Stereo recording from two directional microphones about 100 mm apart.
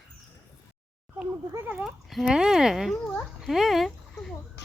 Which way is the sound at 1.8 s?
5° right (ahead or behind).